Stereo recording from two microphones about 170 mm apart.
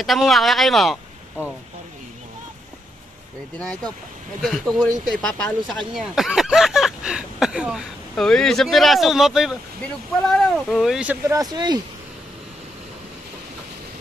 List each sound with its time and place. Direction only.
0.0 s speech: centre (ahead or behind)
3.5 s speech: 5° left (ahead or behind); by 11.8 s 25° right (ahead or behind)